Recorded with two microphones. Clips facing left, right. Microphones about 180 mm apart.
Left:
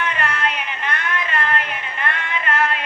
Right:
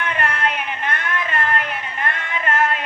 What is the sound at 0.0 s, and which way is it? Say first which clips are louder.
Music: right 1 dB; 55° right (ahead or behind).